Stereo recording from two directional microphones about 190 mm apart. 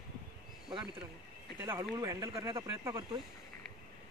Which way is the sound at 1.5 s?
10° right (ahead or behind).